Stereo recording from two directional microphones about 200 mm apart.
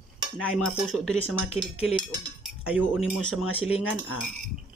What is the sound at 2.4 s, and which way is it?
Cutlery, 5° right (ahead or behind).